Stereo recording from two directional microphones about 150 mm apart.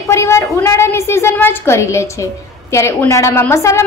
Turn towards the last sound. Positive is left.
turn(degrees=20)  # may be behind; listen again after turning